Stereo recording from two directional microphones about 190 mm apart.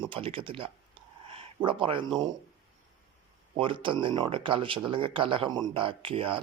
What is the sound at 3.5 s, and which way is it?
Speech, 25° right (ahead or behind).